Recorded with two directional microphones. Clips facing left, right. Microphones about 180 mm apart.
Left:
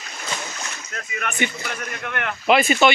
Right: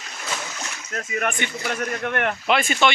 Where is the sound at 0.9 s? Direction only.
40° right (ahead or behind).